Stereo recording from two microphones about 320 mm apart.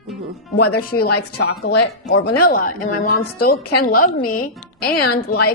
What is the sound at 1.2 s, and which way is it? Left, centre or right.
A woman's voice, left.